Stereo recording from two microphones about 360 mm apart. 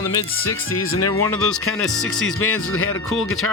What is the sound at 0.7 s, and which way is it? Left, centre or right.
Speech, left.